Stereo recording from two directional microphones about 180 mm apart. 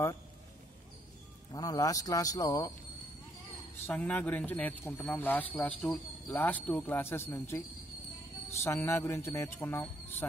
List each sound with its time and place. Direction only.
1.5 s a man's voice: 20° left (ahead or behind)
3.8 s speech: 10° left (ahead or behind)